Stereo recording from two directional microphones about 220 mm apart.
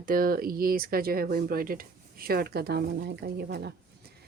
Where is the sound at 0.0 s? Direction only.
40° right (ahead or behind).